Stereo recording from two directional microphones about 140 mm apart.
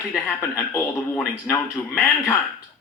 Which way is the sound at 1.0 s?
5° left (ahead or behind).